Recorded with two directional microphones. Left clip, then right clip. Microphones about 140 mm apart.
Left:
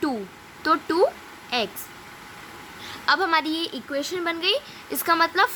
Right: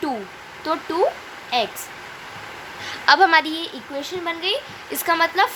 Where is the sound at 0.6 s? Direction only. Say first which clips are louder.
Even; 25° left (ahead or behind).